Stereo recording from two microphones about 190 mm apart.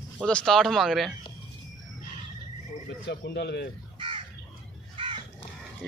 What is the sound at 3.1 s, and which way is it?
Speech, 60° left (ahead or behind).